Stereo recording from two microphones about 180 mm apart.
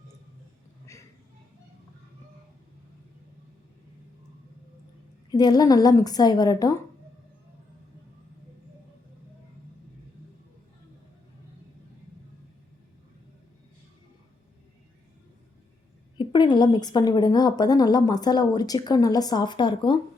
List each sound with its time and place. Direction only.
5.3 s a woman's voice: 20° left (ahead or behind)
16.1 s a woman's voice: 25° left (ahead or behind)